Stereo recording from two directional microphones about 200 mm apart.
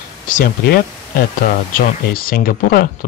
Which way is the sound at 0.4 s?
50° left (ahead or behind).